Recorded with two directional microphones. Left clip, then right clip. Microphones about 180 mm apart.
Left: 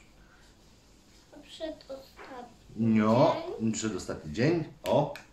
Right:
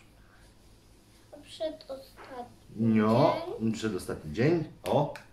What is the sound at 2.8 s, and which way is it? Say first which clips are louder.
Speech: even; centre (ahead or behind).